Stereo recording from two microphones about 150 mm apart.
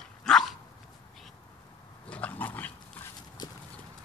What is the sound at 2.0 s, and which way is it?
Dog, 10° left (ahead or behind).